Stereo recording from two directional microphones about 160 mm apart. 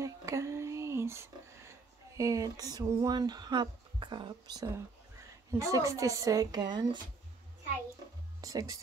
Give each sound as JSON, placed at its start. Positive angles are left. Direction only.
{"t": 0.0, "sound": "a sound", "side_deg": -20}
{"t": 2.1, "sound": "music", "side_deg": -20}
{"t": 8.4, "sound": "speech", "side_deg": -20}